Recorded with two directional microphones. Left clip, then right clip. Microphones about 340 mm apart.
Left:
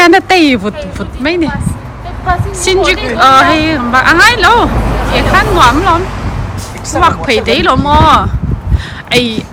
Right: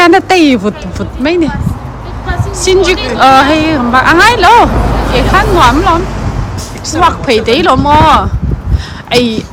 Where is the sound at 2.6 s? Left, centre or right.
Centre.